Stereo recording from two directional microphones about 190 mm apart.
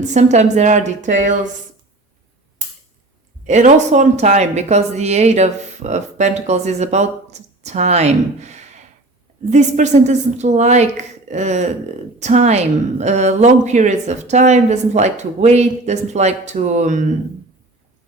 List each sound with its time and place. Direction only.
0.1 s speech: 35° right (ahead or behind)
3.4 s speech: 40° right (ahead or behind)